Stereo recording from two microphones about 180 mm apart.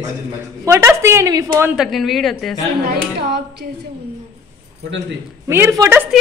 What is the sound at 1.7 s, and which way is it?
Speech, centre (ahead or behind).